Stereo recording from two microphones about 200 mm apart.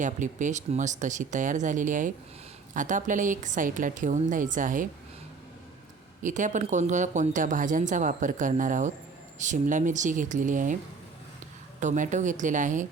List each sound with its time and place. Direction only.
0.0 s speech: 40° right (ahead or behind)
6.2 s speech: 40° right (ahead or behind)
11.8 s speech: 40° right (ahead or behind)